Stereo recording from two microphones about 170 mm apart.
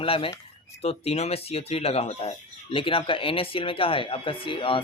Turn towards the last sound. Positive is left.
turn(degrees=30)  # may be behind; listen again after turning